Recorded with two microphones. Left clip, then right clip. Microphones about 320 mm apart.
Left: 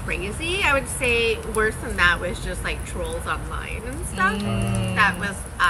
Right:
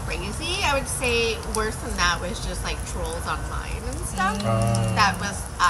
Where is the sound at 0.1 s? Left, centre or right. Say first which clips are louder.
Left 3 dB; centre.